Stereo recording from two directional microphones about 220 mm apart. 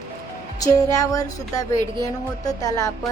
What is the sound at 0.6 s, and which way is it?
Speech, 15° left (ahead or behind).